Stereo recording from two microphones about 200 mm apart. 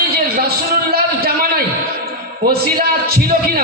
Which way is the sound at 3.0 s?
45° right (ahead or behind).